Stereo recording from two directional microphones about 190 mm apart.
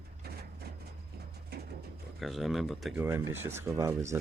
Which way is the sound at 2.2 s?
Centre (ahead or behind).